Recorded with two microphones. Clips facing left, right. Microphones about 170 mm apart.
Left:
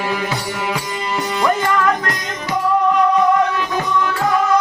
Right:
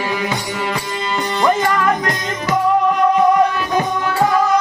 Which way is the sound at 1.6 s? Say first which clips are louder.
Right 1 dB; 15° right (ahead or behind).